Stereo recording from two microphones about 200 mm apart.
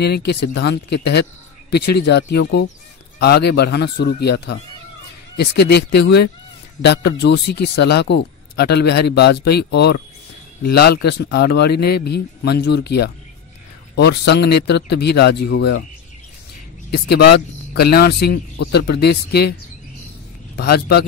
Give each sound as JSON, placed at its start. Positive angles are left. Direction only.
{"t": 0.0, "sound": "speech", "side_deg": 55}
{"t": 16.9, "sound": "speech", "side_deg": 55}
{"t": 20.5, "sound": "speech", "side_deg": 55}